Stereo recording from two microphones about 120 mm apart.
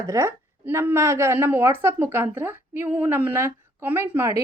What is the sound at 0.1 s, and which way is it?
Speech, 20° right (ahead or behind).